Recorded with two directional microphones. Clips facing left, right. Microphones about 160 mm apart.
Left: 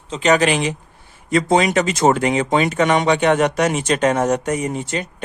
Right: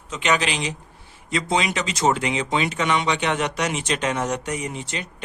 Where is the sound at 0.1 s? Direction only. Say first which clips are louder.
Left 7 dB; 40° left (ahead or behind).